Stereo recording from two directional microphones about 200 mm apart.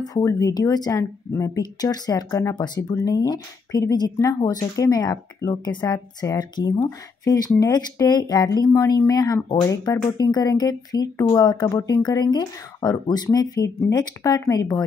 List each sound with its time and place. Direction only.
0.0 s speech: 15° left (ahead or behind)